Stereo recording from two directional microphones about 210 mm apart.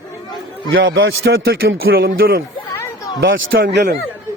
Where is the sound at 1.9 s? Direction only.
45° right (ahead or behind).